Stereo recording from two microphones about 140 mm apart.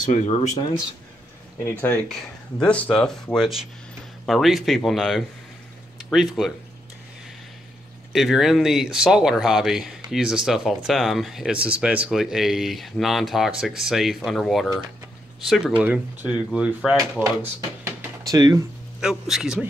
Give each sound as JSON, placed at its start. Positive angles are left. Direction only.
{"t": 0.1, "sound": "speech", "side_deg": 55}
{"t": 1.7, "sound": "speech", "side_deg": 10}
{"t": 8.1, "sound": "speech", "side_deg": 0}
{"t": 17.6, "sound": "a sound", "side_deg": -25}
{"t": 18.9, "sound": "speech", "side_deg": -5}